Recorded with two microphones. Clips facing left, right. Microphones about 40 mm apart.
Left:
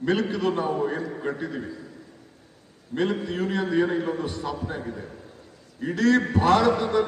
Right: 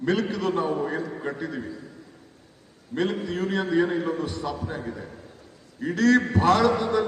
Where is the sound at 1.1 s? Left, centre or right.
Centre.